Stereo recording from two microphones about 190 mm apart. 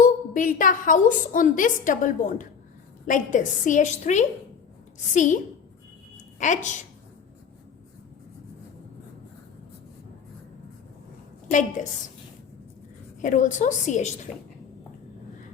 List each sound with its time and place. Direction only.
0.0 s a woman's voice: 45° left (ahead or behind)
6.4 s a woman's voice: 40° left (ahead or behind)
11.8 s a woman's voice: 40° left (ahead or behind)
13.2 s a woman's voice: 40° left (ahead or behind)